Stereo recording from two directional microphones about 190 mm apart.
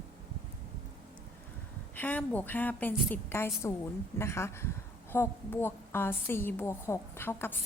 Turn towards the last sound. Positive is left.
turn(degrees=10)  # may be behind; listen again after turning